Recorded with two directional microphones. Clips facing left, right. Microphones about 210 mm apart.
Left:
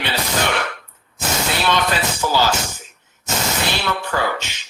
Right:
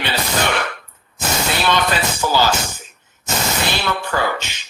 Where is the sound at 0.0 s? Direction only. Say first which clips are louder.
Right 1 dB; 50° right (ahead or behind).